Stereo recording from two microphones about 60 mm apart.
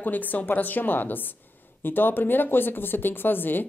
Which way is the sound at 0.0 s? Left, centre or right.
Left.